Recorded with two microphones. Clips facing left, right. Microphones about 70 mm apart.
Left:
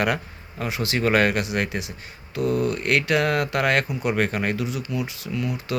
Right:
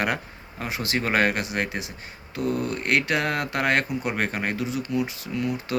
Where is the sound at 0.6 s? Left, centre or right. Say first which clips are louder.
Left 3 dB; right.